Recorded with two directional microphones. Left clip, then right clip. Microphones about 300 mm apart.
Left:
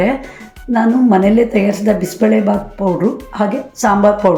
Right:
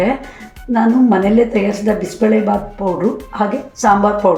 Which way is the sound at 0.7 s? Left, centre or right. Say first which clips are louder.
Left 1 dB; centre.